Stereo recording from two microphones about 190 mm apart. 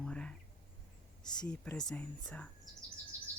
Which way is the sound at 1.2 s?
20° left (ahead or behind).